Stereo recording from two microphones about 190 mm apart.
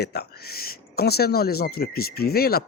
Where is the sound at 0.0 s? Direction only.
55° left (ahead or behind).